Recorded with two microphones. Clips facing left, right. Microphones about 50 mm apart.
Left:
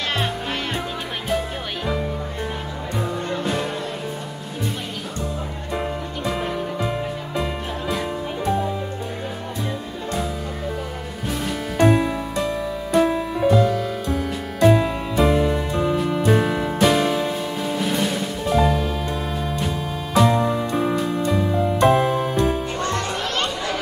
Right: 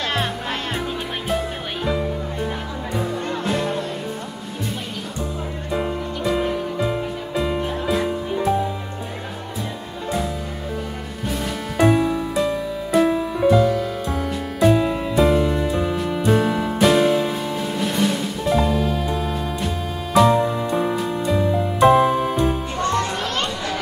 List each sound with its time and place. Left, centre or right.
5.7 s music: centre
11.2 s music: centre